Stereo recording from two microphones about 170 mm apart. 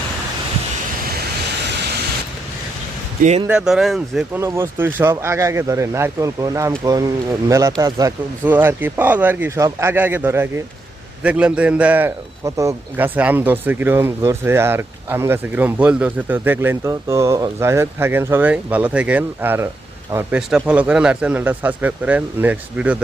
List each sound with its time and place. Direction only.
3.4 s speech: 5° right (ahead or behind)
4.4 s a man's voice: 15° right (ahead or behind)